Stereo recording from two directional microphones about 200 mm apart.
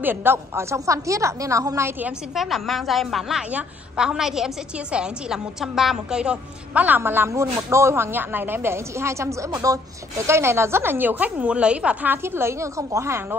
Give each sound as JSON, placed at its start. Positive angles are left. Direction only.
{"t": 0.0, "sound": "a woman's voice", "side_deg": -10}